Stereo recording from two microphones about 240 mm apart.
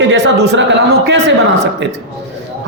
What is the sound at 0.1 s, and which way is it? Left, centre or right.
Speech, right.